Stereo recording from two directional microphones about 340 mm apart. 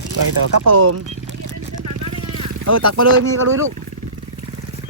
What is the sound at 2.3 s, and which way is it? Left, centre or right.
Vehicle, right.